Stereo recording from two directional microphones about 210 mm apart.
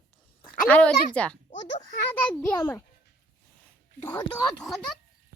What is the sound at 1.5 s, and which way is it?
Speech, 30° left (ahead or behind).